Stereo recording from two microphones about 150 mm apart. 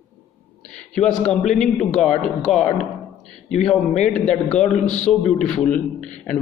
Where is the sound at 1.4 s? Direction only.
55° left (ahead or behind).